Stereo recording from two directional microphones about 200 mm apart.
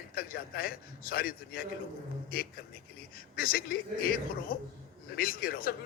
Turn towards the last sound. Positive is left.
turn(degrees=45)  # may be behind; listen again after turning